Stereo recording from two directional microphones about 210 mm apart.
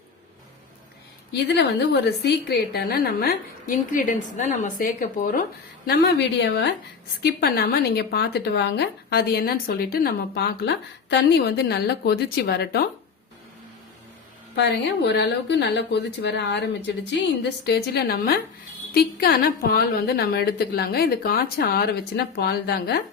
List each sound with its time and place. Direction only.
1.3 s a woman's voice: 50° left (ahead or behind)
14.5 s a woman's voice: 55° left (ahead or behind)